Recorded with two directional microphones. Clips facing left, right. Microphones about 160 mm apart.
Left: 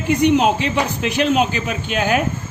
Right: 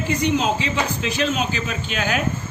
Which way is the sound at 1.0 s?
60° left (ahead or behind).